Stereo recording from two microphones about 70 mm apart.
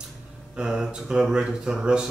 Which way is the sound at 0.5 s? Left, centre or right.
Centre.